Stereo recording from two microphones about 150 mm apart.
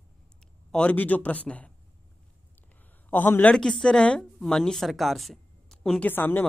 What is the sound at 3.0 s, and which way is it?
Speech, 10° left (ahead or behind).